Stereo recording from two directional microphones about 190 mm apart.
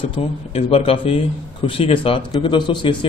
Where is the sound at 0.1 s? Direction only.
30° left (ahead or behind).